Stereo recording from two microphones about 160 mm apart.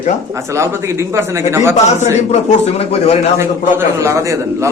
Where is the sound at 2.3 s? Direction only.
40° left (ahead or behind).